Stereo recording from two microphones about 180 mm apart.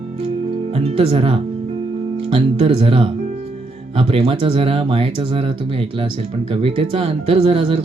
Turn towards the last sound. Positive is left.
turn(degrees=-30)  # may be behind; listen again after turning